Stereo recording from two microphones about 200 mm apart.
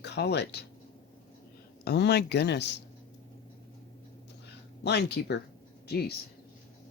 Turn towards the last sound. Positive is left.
turn(degrees=50)  # may be behind; listen again after turning